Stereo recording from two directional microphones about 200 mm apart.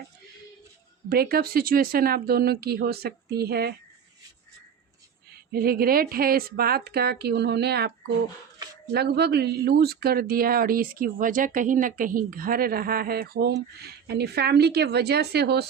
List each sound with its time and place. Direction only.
1.1 s speech: 50° right (ahead or behind)
5.5 s speech: 50° right (ahead or behind)